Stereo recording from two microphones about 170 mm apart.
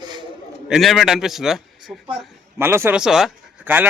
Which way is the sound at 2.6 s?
15° right (ahead or behind).